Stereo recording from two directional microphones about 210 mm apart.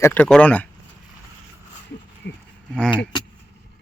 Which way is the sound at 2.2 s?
55° left (ahead or behind).